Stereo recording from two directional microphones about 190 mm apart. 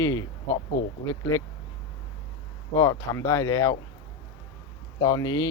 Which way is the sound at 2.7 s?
15° left (ahead or behind).